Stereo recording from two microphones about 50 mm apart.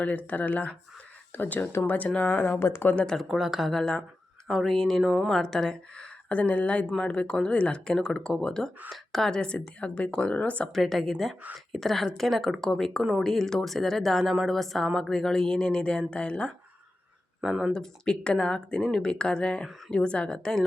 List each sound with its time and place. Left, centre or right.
0.0 s speech: left
2.4 s speech: left
2.9 s speech: centre
3.2 s speech: centre
4.4 s a woman's voice: centre
6.2 s a woman's voice: left; by 9.5 s centre
9.5 s speech: left
10.7 s a woman's voice: centre
17.7 s a woman's voice: centre